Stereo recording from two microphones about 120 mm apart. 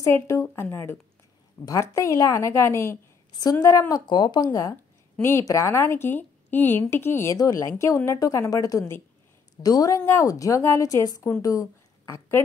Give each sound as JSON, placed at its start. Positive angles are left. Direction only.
{"t": 0.0, "sound": "a woman's voice", "side_deg": 25}
{"t": 4.5, "sound": "a woman's voice", "side_deg": 25}